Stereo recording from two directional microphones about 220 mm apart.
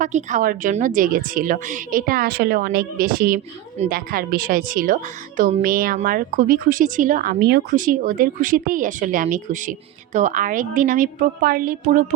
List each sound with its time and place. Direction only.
0.0 s a woman's voice: 35° right (ahead or behind)